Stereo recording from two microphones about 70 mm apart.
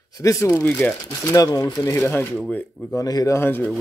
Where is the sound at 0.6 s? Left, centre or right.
Centre.